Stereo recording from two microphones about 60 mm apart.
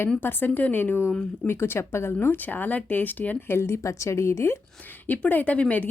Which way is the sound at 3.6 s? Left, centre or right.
Left.